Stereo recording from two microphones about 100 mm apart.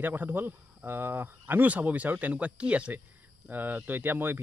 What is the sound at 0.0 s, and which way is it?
Speech, 20° right (ahead or behind).